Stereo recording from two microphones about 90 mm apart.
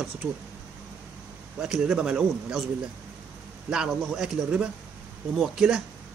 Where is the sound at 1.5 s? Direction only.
5° right (ahead or behind).